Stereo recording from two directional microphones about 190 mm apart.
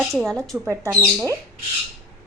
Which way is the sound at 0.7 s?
15° right (ahead or behind).